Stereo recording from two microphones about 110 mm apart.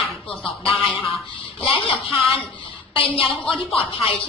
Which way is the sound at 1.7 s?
50° left (ahead or behind).